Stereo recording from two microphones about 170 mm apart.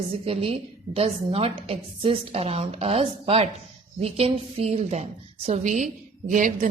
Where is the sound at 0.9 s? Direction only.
35° right (ahead or behind).